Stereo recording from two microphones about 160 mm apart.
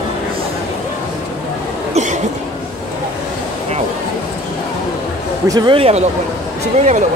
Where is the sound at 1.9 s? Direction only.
50° right (ahead or behind).